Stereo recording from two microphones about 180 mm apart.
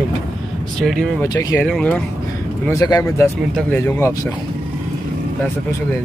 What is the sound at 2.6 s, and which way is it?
Speech, 20° left (ahead or behind).